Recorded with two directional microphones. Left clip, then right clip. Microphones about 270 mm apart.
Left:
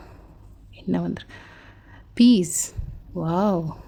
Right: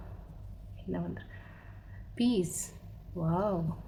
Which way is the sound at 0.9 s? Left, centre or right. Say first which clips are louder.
Left 11 dB; left.